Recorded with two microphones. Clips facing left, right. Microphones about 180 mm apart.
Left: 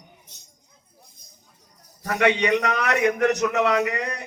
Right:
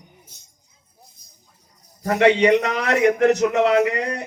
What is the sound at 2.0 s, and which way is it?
A man's voice, 30° right (ahead or behind).